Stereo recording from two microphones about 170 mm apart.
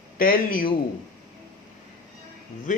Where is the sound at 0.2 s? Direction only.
55° left (ahead or behind).